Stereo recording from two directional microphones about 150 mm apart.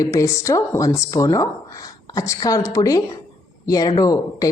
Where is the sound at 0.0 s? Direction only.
20° left (ahead or behind).